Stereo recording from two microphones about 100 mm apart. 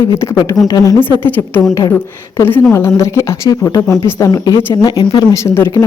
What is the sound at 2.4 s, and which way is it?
A woman's voice, 20° left (ahead or behind).